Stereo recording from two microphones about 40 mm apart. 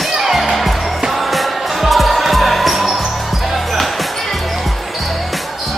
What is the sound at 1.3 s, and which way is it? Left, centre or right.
Basketball bounce, centre.